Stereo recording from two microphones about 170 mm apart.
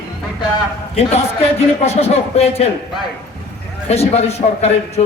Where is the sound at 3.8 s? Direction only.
40° left (ahead or behind).